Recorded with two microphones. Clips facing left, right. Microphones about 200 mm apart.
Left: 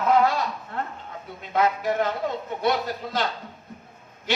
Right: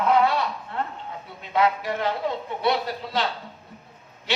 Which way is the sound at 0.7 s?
45° left (ahead or behind).